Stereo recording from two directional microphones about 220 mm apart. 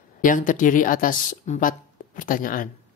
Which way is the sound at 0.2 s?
35° left (ahead or behind).